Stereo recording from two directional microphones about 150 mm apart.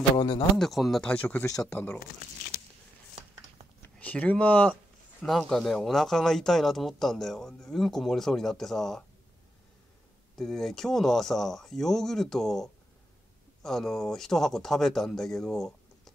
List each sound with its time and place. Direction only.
0.6 s speech: centre (ahead or behind)
1.3 s speech: 20° left (ahead or behind)
1.6 s speech: 10° left (ahead or behind)
3.8 s speech: 10° left (ahead or behind)
10.3 s speech: centre (ahead or behind)